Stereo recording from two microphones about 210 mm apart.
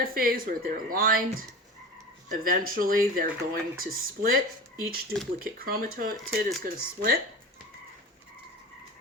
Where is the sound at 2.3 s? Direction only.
40° right (ahead or behind).